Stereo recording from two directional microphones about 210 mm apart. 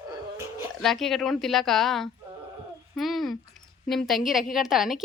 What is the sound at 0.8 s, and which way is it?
A woman's voice, centre (ahead or behind).